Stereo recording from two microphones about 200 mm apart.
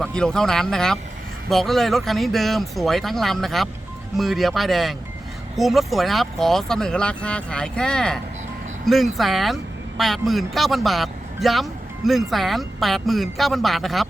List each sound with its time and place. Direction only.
0.0 s a man's voice: 5° left (ahead or behind)